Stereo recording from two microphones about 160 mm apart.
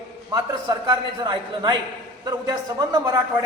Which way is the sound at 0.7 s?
25° right (ahead or behind).